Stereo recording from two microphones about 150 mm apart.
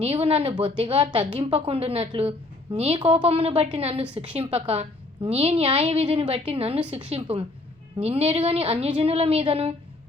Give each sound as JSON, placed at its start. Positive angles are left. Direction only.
{"t": 0.0, "sound": "a woman's voice", "side_deg": -40}